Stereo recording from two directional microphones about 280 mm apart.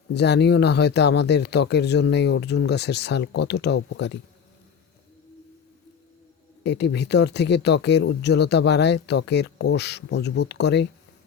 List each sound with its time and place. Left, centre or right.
0.1 s speech: left
6.6 s speech: left